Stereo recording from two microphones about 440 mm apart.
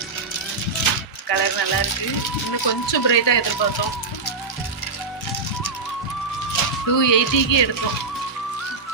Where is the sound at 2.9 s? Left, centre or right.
Left.